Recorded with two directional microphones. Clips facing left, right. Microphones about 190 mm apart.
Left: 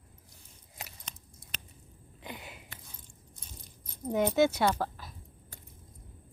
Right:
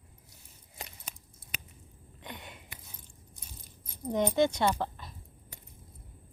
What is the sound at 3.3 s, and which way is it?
Keys jangling, 10° right (ahead or behind).